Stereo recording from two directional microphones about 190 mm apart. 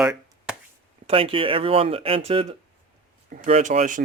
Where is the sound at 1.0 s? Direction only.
30° right (ahead or behind).